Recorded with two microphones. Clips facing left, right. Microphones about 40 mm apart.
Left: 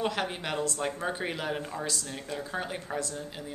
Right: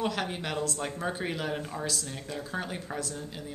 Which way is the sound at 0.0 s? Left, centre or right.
Centre.